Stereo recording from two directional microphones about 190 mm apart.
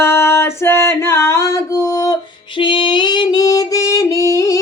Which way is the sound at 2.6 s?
25° left (ahead or behind).